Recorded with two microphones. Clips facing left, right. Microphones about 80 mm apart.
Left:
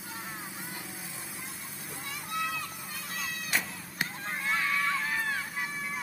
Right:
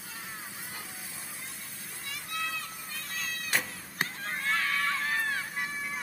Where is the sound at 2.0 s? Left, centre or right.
Centre.